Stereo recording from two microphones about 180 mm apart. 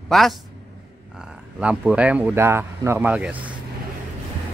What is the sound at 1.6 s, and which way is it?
Speech, 5° right (ahead or behind).